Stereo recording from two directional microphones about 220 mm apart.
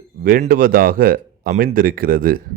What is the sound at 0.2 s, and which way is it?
Speech, 40° right (ahead or behind).